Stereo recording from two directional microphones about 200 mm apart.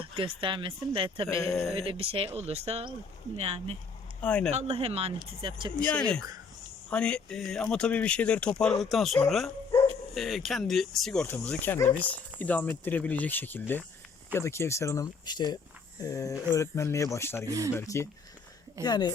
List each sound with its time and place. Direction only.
0.0 s speech: 25° right (ahead or behind)
1.5 s speech: centre (ahead or behind)
1.7 s speech: 30° right (ahead or behind)
4.2 s speech: 5° left (ahead or behind)
4.5 s speech: 30° right (ahead or behind)
5.9 s speech: 5° left (ahead or behind)
17.4 s speech: 15° right (ahead or behind)
17.7 s speech: 15° left (ahead or behind)